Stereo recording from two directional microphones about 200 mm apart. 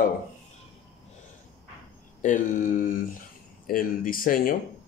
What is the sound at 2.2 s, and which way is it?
Speech, 40° left (ahead or behind).